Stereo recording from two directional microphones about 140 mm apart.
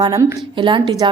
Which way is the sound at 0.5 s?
35° right (ahead or behind).